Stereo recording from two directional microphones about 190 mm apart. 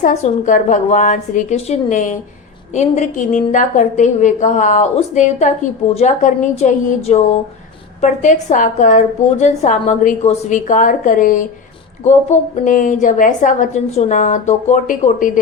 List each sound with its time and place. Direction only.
0.0 s a woman's voice: 40° left (ahead or behind)